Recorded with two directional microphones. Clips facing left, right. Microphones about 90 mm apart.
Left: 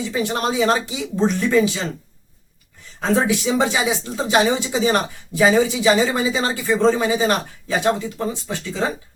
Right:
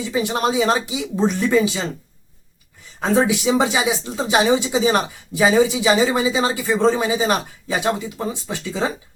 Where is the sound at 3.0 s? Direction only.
15° right (ahead or behind).